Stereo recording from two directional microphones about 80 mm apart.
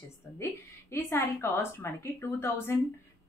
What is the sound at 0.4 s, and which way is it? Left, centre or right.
A woman's voice, left.